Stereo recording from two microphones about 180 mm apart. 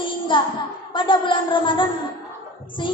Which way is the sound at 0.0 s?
25° left (ahead or behind).